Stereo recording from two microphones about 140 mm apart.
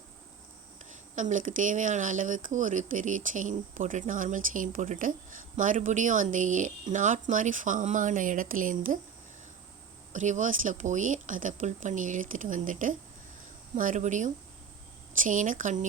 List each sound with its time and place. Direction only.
1.1 s speech: 65° right (ahead or behind)
10.1 s speech: 60° right (ahead or behind)